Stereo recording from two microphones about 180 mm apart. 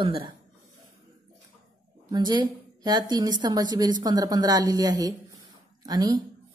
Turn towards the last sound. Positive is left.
turn(degrees=-20)  # may be behind; listen again after turning